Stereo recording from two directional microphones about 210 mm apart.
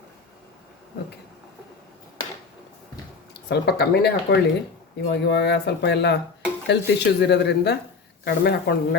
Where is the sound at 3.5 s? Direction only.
50° left (ahead or behind).